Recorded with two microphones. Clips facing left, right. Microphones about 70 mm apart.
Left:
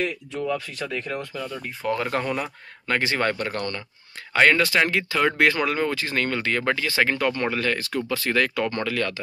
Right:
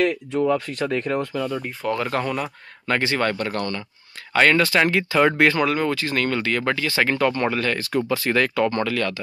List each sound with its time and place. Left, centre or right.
0.5 s speech: right
1.3 s speech: right
1.8 s speech: centre
4.8 s speech: centre
5.6 s speech: centre
7.1 s speech: centre
7.9 s speech: centre
8.5 s speech: centre